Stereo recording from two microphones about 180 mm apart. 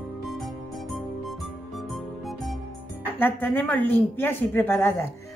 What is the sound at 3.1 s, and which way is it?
A woman's voice, 10° left (ahead or behind).